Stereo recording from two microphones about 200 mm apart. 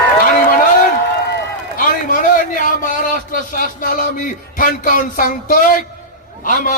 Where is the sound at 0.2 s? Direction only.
45° left (ahead or behind).